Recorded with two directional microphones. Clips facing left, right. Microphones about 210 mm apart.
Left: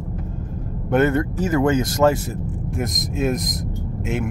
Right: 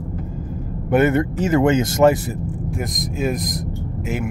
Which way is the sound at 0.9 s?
15° right (ahead or behind).